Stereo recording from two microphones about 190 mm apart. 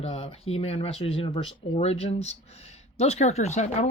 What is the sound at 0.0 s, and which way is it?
Speech, 35° left (ahead or behind).